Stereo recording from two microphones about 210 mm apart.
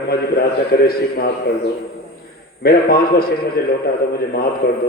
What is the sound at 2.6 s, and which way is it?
A man's voice, 45° left (ahead or behind).